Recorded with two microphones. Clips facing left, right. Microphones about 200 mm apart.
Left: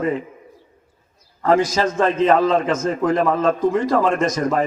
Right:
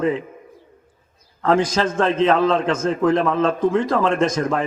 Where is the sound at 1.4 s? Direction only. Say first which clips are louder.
Left 1 dB; 10° left (ahead or behind).